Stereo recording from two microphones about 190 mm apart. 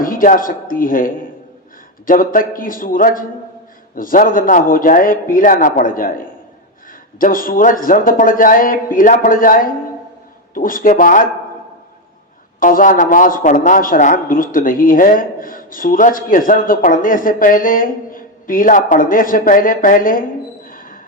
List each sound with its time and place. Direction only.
0.0 s speech: 45° left (ahead or behind)
12.5 s speech: 45° left (ahead or behind)
20.7 s music: 45° left (ahead or behind)